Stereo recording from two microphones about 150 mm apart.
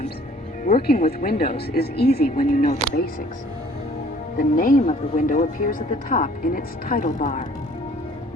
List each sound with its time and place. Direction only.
0.6 s speech: 85° left; by 2.7 s 65° left (ahead or behind)
4.4 s speech: 65° left (ahead or behind)
4.8 s speech: 50° left (ahead or behind)